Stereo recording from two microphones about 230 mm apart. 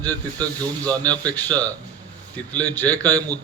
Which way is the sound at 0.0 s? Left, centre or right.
Centre.